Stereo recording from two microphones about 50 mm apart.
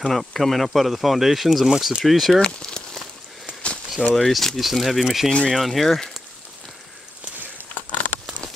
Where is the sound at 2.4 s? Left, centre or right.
Centre.